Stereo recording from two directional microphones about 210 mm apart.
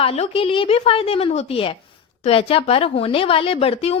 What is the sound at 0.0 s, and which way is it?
Speech, 25° left (ahead or behind).